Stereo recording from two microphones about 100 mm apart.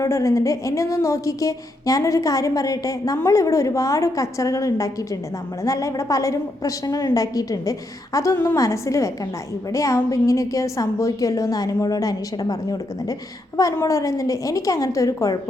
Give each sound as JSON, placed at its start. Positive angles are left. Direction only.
{"t": 0.0, "sound": "a woman's voice", "side_deg": 30}